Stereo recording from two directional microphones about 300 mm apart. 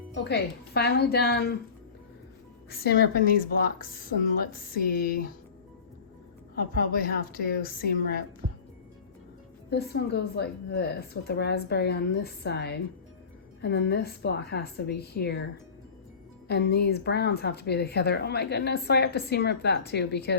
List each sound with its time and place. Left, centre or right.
0.1 s a woman's voice: left
2.6 s a woman's voice: left
6.6 s a woman's voice: left
8.4 s music: right
9.6 s a woman's voice: left
16.5 s a woman's voice: left